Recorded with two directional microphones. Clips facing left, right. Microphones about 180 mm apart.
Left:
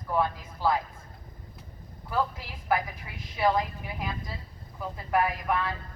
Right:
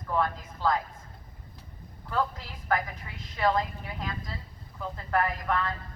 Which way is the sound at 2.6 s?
10° left (ahead or behind).